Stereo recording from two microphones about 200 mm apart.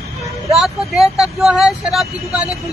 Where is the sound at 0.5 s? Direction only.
Centre (ahead or behind).